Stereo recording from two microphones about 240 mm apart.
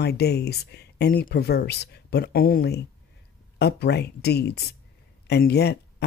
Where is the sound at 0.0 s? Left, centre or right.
Left.